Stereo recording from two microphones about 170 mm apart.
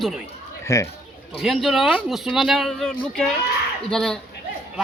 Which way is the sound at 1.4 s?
Centre (ahead or behind).